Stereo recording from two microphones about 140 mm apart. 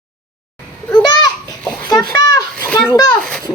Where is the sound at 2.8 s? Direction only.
25° left (ahead or behind).